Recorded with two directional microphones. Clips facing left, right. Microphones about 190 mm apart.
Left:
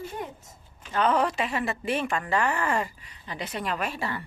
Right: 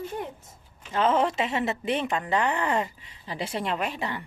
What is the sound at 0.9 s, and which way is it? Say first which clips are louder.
A woman's voice: right 1 dB; 25° right (ahead or behind).